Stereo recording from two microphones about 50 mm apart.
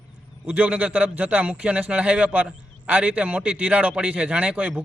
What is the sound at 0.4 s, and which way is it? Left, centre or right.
A man's voice, right.